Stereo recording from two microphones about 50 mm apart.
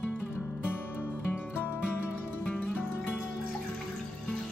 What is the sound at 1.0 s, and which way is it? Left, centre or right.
Music, left.